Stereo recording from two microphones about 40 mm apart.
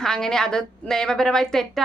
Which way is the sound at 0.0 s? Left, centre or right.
Centre.